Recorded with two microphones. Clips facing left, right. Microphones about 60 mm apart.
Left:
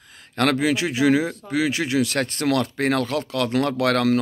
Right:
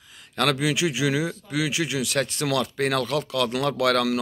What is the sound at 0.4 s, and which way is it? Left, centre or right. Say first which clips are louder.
Speech: left 3 dB; left.